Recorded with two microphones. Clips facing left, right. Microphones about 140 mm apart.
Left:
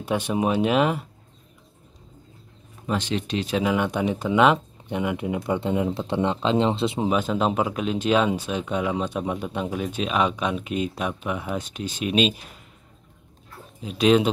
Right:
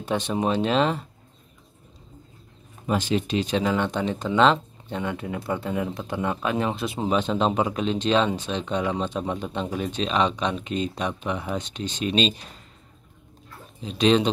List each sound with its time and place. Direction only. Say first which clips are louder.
0.0 s speech: left 1 dB; 10° left (ahead or behind)
2.9 s speech: right 2 dB; 5° right (ahead or behind); by 7.1 s 25° left (ahead or behind)
7.1 s speech: right 3 dB; 5° left (ahead or behind)
13.8 s speech: left 1 dB; 5° left (ahead or behind)